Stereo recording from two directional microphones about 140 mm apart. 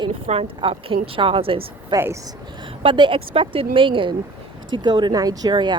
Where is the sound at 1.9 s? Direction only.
20° right (ahead or behind).